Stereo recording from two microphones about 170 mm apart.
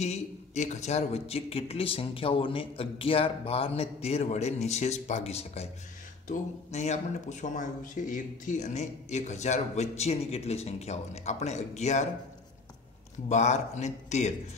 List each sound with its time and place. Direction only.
0.0 s speech: 40° left (ahead or behind)
13.3 s speech: 45° left (ahead or behind)